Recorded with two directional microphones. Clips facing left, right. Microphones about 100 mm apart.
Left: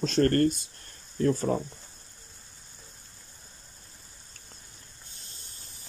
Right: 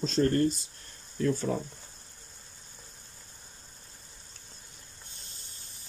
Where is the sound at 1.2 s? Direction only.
40° left (ahead or behind).